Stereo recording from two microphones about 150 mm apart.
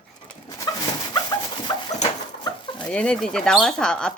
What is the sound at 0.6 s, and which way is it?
Dog, 25° left (ahead or behind).